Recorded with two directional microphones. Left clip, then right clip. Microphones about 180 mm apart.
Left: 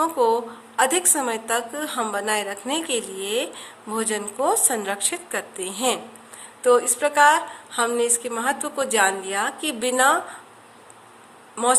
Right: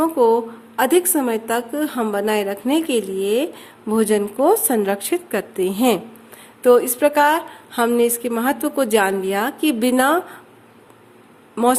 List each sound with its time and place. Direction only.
0.0 s a woman's voice: 40° right (ahead or behind)
11.5 s a woman's voice: 45° right (ahead or behind)